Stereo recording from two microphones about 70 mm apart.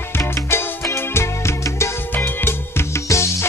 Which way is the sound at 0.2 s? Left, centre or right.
Left.